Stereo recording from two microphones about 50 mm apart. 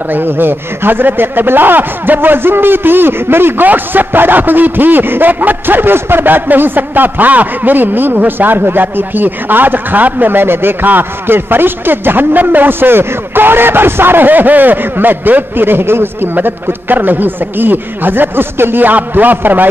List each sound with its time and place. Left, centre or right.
0.1 s a man's voice: right